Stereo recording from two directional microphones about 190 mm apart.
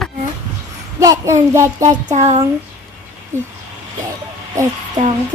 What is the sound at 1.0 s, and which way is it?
Child singing, 15° right (ahead or behind).